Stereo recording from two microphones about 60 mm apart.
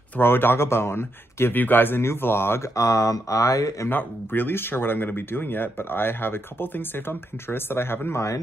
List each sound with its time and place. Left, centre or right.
0.2 s speech: left
2.7 s speech: left
3.9 s speech: left